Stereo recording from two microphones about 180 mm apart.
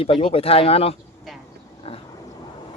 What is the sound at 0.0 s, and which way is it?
Speech, 30° left (ahead or behind).